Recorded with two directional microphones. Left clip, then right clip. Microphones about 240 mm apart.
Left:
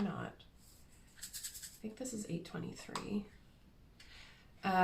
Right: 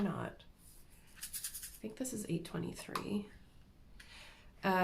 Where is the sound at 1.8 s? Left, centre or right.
Right.